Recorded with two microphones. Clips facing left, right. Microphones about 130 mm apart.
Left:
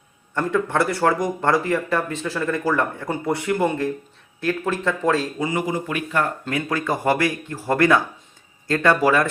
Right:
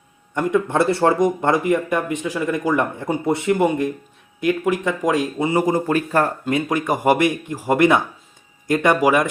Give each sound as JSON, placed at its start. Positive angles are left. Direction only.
{"t": 0.3, "sound": "speech", "side_deg": -15}
{"t": 5.5, "sound": "speech", "side_deg": -40}
{"t": 6.5, "sound": "speech", "side_deg": -20}